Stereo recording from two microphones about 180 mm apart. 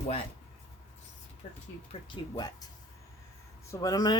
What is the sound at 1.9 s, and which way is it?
Speech, 30° left (ahead or behind).